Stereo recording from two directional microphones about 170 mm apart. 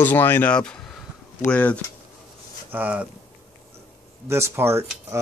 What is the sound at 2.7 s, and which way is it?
Speech, 10° right (ahead or behind).